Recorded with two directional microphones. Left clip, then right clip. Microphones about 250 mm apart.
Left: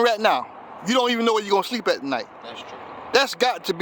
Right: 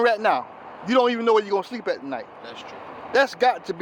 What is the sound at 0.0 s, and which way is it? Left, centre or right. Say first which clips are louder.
A man's voice: left 1 dB; left.